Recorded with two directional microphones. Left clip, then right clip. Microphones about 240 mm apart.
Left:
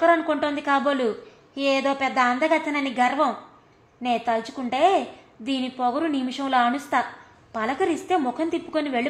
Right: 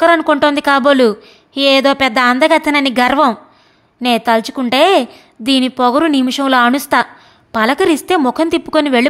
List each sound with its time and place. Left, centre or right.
0.0 s a woman's voice: right